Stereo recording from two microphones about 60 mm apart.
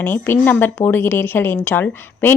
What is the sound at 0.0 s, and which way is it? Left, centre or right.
Speech, left.